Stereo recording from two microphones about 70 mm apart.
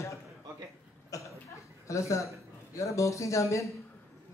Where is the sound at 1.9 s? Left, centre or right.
Left.